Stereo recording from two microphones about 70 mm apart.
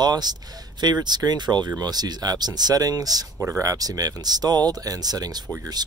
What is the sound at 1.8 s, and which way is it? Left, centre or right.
Speech, right.